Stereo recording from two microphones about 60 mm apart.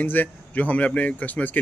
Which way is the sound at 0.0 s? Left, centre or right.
Left.